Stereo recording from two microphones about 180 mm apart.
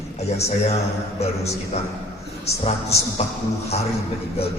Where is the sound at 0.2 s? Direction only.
35° left (ahead or behind).